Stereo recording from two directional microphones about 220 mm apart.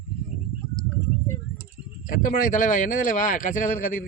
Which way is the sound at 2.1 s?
40° left (ahead or behind).